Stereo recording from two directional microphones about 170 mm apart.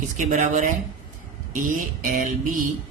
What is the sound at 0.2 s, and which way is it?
Speech, 45° right (ahead or behind).